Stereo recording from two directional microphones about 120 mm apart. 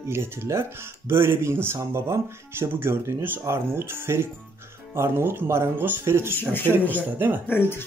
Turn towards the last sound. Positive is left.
turn(degrees=15)  # may be behind; listen again after turning